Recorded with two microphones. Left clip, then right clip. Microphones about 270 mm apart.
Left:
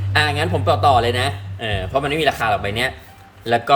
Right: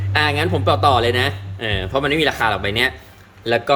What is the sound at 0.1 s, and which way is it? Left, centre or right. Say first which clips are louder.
A man's voice: even; centre.